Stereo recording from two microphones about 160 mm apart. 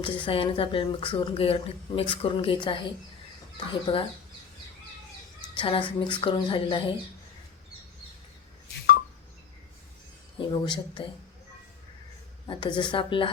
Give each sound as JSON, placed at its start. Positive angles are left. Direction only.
{"t": 0.0, "sound": "a woman's voice", "side_deg": 35}
{"t": 5.5, "sound": "a woman's voice", "side_deg": 35}
{"t": 10.3, "sound": "a woman's voice", "side_deg": 30}
{"t": 12.5, "sound": "a woman's voice", "side_deg": 30}